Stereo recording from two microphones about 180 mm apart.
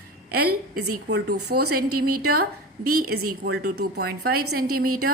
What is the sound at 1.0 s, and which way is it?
A woman's voice, 70° right (ahead or behind).